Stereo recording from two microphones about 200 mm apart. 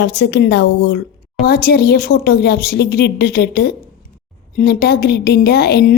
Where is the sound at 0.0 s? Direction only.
60° left (ahead or behind).